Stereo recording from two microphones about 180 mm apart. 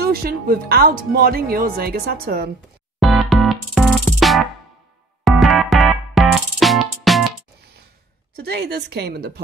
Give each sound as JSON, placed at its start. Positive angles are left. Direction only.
{"t": 0.0, "sound": "speech", "side_deg": -60}
{"t": 3.0, "sound": "music", "side_deg": 0}
{"t": 8.4, "sound": "speech", "side_deg": -60}